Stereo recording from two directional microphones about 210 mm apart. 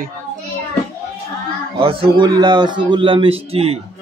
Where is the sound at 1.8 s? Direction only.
25° right (ahead or behind).